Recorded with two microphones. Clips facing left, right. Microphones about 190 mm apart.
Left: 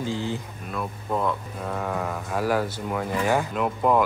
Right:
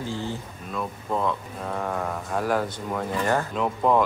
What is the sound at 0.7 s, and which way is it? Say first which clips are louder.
Speech: even; 5° left (ahead or behind).